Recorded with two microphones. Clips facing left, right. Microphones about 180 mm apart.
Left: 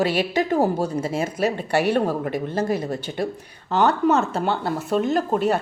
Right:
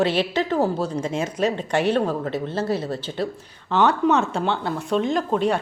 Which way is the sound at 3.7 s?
Centre (ahead or behind).